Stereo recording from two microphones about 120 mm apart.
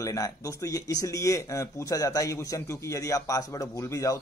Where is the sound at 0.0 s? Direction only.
30° left (ahead or behind).